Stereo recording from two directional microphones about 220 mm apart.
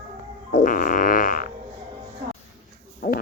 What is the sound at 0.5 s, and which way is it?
Fart, 40° left (ahead or behind).